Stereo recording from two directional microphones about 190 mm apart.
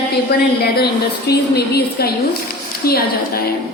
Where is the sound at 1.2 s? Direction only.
55° left (ahead or behind).